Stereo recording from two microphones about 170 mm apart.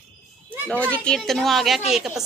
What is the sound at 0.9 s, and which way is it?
Speech, 5° left (ahead or behind).